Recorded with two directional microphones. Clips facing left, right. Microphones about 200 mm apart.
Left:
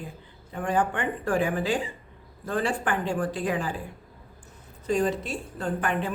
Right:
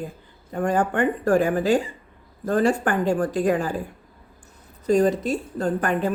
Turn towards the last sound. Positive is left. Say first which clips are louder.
# right 5 dB
turn(degrees=-40)  # may be behind; listen again after turning